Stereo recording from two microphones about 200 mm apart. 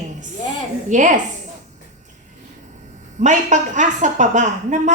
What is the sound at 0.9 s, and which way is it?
Speech, 40° right (ahead or behind).